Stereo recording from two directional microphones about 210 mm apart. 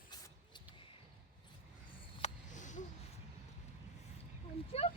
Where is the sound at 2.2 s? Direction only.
35° left (ahead or behind).